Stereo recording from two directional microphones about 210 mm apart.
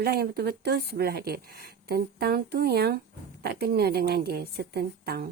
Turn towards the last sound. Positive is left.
turn(degrees=-50)  # may be behind; listen again after turning